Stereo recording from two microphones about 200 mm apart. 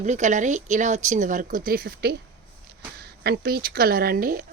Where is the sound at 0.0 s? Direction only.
35° right (ahead or behind).